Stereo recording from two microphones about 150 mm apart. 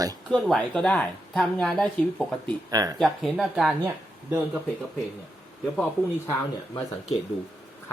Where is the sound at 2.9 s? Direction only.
Centre (ahead or behind).